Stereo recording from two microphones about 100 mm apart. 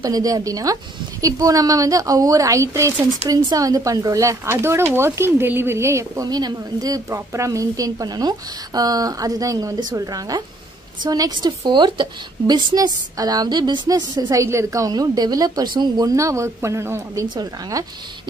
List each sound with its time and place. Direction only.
0.0 s a woman's voice: 35° right (ahead or behind)
6.2 s a woman's voice: 40° right (ahead or behind)
14.4 s a woman's voice: 30° right (ahead or behind)